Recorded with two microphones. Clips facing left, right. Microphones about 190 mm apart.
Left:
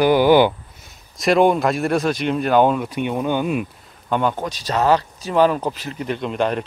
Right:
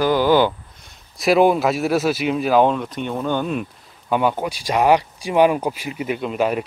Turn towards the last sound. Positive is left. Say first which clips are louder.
# right 1 dB
turn(degrees=-5)  # may be behind; listen again after turning